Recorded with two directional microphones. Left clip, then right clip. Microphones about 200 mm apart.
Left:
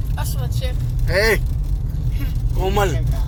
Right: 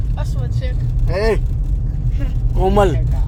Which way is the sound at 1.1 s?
Centre (ahead or behind).